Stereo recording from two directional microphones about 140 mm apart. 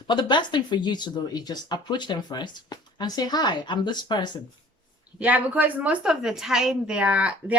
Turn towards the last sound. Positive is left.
turn(degrees=-10)  # may be behind; listen again after turning